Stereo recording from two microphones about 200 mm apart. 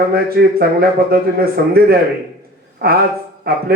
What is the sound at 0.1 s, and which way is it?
Speech, 50° right (ahead or behind).